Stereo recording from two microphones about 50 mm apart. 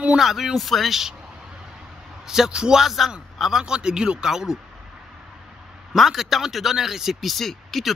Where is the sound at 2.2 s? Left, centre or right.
Centre.